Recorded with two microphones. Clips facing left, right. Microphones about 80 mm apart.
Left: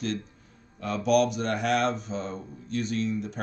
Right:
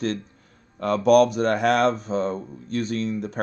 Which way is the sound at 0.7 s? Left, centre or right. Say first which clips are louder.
Right 7 dB; right.